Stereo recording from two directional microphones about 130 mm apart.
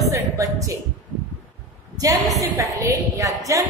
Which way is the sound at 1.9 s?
30° right (ahead or behind).